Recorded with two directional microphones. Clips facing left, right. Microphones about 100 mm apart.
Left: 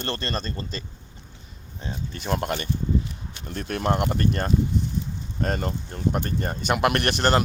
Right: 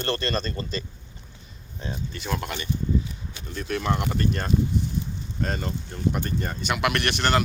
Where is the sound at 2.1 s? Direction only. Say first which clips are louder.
Left 6 dB; 45° left (ahead or behind).